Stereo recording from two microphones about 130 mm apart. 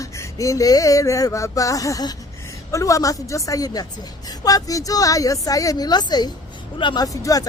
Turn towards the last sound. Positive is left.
turn(degrees=25)  # may be behind; listen again after turning